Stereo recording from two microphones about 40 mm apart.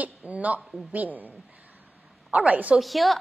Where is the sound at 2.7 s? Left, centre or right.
Centre.